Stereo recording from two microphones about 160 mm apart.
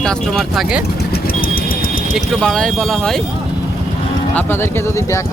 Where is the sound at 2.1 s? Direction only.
5° left (ahead or behind).